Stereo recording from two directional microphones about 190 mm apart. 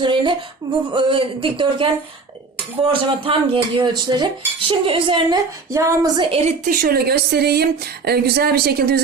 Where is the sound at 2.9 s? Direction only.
30° right (ahead or behind).